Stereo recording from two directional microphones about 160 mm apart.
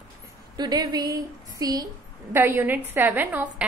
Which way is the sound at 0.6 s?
25° right (ahead or behind).